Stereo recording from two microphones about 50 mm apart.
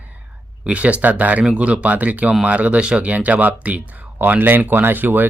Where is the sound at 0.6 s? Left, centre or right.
Right.